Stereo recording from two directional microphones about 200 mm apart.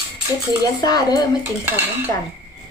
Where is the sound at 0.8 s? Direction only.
20° left (ahead or behind).